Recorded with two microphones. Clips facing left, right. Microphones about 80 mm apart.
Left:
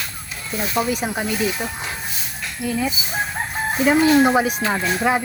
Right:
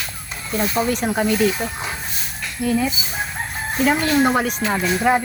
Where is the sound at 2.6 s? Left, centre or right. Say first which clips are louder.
Right 5 dB; centre.